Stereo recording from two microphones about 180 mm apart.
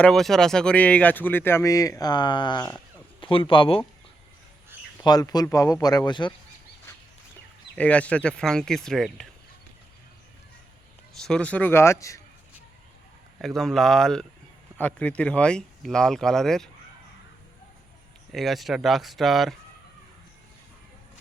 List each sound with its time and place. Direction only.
0.0 s speech: centre (ahead or behind); by 3.8 s 30° left (ahead or behind)
5.0 s speech: 20° left (ahead or behind)
6.9 s a sound: 15° left (ahead or behind)
7.8 s speech: 5° left (ahead or behind)
11.2 s speech: 5° left (ahead or behind)
13.4 s speech: centre (ahead or behind)
18.3 s speech: centre (ahead or behind)